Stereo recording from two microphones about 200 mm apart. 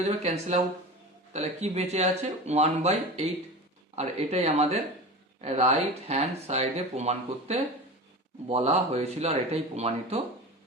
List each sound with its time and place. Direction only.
0.0 s speech: 35° right (ahead or behind)